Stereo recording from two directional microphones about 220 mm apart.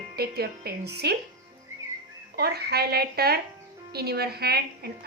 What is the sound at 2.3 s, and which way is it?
A woman's voice, 45° right (ahead or behind).